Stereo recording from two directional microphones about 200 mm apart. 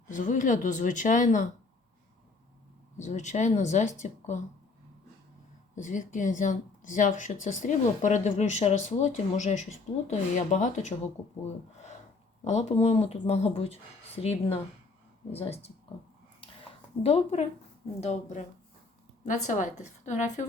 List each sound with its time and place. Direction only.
0.1 s speech: 40° left (ahead or behind)
3.0 s speech: 35° left (ahead or behind)
5.7 s speech: 40° left (ahead or behind)
12.5 s speech: 30° left (ahead or behind)
17.0 s speech: 30° left (ahead or behind)